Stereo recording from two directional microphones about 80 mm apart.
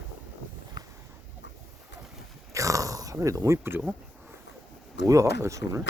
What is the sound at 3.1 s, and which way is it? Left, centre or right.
Speech, right.